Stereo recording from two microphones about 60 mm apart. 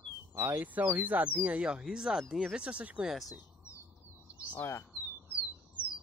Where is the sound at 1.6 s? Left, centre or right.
Centre.